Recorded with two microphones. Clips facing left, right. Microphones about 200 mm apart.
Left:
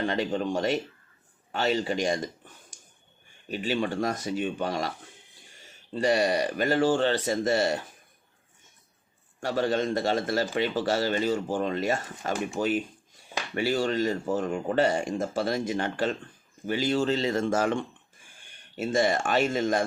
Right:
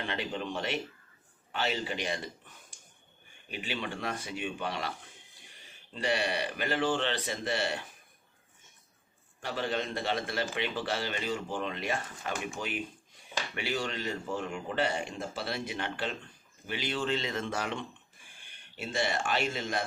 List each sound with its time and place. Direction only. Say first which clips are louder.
0.1 s speech: left 8 dB; 45° left (ahead or behind)
3.5 s speech: left 9 dB; 40° left (ahead or behind)
5.9 s speech: left 7 dB; 40° left (ahead or behind)
9.4 s speech: left 7 dB; 40° left (ahead or behind)